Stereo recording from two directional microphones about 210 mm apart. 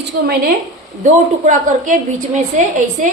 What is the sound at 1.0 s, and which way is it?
A man's voice, 35° right (ahead or behind).